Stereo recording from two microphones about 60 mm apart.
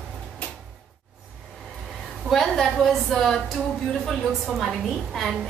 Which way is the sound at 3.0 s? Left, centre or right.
Centre.